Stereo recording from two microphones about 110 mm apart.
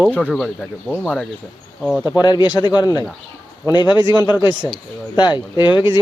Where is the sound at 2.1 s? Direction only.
35° left (ahead or behind).